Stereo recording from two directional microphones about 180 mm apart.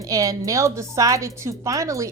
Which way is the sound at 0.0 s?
20° right (ahead or behind).